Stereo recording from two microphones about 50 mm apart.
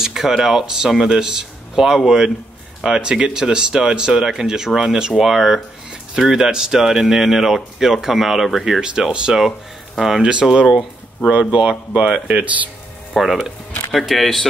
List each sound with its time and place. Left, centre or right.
0.0 s speech: centre
8.8 s speech: centre
9.9 s speech: centre
10.2 s speech: centre
13.1 s speech: centre